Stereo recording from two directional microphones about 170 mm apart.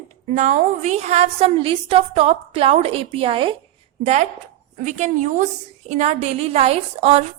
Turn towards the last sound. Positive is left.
turn(degrees=-35)  # may be behind; listen again after turning